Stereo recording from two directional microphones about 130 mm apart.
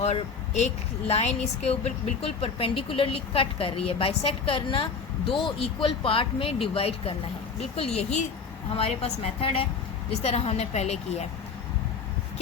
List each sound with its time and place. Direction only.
0.0 s a woman's voice: 60° left (ahead or behind)